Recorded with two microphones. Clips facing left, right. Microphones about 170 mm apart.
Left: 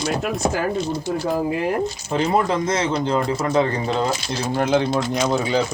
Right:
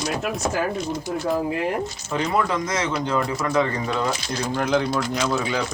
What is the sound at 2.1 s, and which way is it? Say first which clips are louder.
Speech: left 3 dB; 25° left (ahead or behind).